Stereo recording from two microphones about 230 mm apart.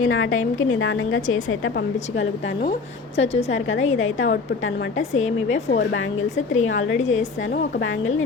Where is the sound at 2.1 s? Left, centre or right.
Left.